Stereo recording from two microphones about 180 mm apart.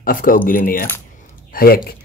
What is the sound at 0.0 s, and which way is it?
Speech, 50° left (ahead or behind).